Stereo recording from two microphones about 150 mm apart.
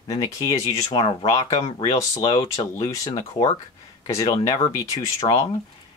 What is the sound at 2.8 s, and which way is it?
Speech, 20° left (ahead or behind).